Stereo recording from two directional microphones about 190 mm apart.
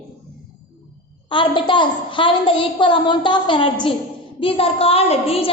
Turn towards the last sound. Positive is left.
turn(degrees=30)  # may be behind; listen again after turning